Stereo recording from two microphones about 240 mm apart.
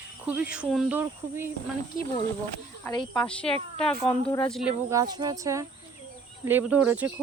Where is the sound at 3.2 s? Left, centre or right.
Centre.